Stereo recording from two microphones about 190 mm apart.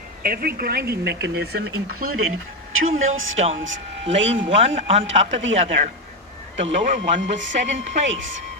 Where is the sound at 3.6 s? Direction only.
80° right.